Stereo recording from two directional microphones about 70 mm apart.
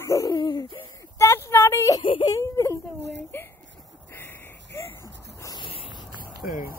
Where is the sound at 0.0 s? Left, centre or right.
Left.